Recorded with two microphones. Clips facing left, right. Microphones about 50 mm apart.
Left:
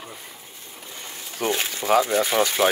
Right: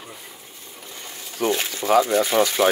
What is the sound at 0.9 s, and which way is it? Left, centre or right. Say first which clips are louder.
Sewing machine: even; centre.